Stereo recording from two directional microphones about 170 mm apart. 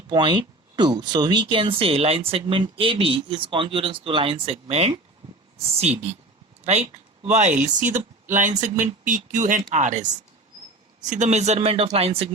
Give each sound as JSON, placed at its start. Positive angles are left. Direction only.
{"t": 0.1, "sound": "speech", "side_deg": -25}